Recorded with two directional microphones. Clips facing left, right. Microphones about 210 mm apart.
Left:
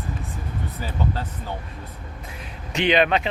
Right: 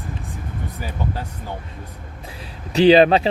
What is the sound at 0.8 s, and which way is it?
Speech, 15° right (ahead or behind).